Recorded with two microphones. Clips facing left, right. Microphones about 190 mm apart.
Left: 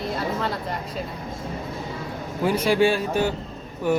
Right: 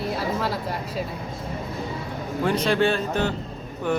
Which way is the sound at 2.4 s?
10° left (ahead or behind).